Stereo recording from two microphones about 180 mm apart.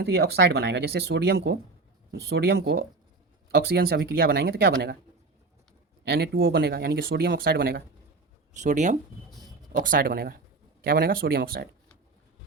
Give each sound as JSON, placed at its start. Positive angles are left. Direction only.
{"t": 0.0, "sound": "speech", "side_deg": -65}
{"t": 3.5, "sound": "speech", "side_deg": -60}
{"t": 6.1, "sound": "speech", "side_deg": -65}
{"t": 8.5, "sound": "speech", "side_deg": -40}